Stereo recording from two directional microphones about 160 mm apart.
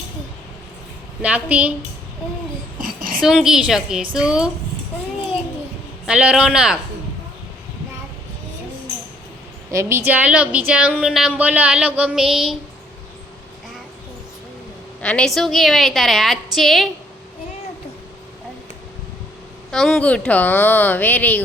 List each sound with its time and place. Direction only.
1.2 s speech: 10° right (ahead or behind)
2.8 s a woman's voice: 60° right (ahead or behind)
3.2 s a woman's voice: 5° right (ahead or behind)
6.1 s speech: 5° right (ahead or behind)
9.7 s speech: 15° right (ahead or behind)
15.0 s a woman's voice: 5° left (ahead or behind)
19.7 s a woman's voice: centre (ahead or behind)